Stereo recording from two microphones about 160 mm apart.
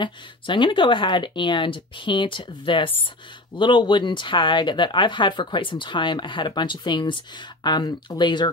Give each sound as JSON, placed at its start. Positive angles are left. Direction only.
{"t": 0.0, "sound": "speech", "side_deg": 30}